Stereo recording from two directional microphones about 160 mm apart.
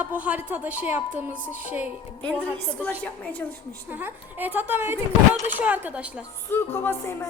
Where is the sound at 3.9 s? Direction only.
10° right (ahead or behind).